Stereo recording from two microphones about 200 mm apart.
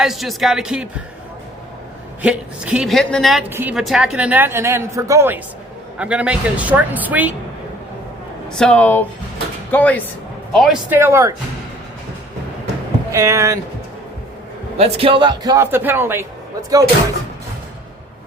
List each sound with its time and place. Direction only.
0.0 s a woman's voice: centre (ahead or behind)
2.2 s a woman's voice: 5° right (ahead or behind)
8.5 s a woman's voice: 5° left (ahead or behind); by 11.3 s 15° right (ahead or behind)
13.1 s speech: 15° right (ahead or behind)
14.8 s a woman's voice: 30° right (ahead or behind); by 16.2 s 10° right (ahead or behind)